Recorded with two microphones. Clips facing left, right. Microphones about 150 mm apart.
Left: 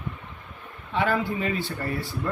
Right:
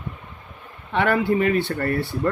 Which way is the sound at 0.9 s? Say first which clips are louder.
Right 5 dB; 65° right (ahead or behind).